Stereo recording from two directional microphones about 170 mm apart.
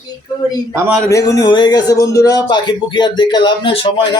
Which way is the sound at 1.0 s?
20° left (ahead or behind).